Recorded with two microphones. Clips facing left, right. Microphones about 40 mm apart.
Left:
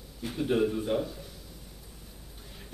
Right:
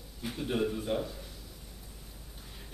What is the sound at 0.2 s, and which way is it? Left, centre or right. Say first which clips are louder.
Speech: left 5 dB; centre.